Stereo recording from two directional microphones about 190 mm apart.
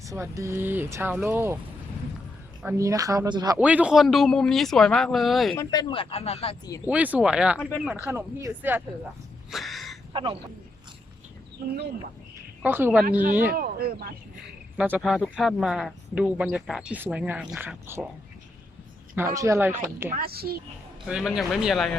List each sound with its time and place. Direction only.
0.0 s speech: 15° right (ahead or behind)
2.6 s speech: 15° right (ahead or behind)
3.6 s speech: 5° right (ahead or behind)
5.5 s speech: 25° left (ahead or behind)
6.8 s speech: 10° right (ahead or behind)
9.5 s a sound: centre (ahead or behind)
10.1 s speech: 25° right (ahead or behind)
12.6 s speech: 10° right (ahead or behind)
13.5 s speech: 50° right (ahead or behind)
14.8 s speech: 5° right (ahead or behind)
19.1 s speech: 15° right (ahead or behind)
20.1 s speech: 55° right (ahead or behind)
21.1 s speech: 5° right (ahead or behind)